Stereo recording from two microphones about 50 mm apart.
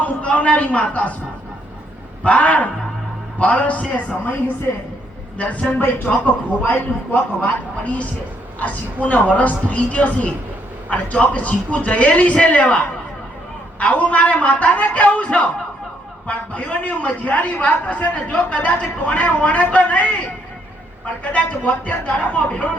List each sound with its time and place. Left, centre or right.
0.0 s a man's voice: left
2.2 s a man's voice: left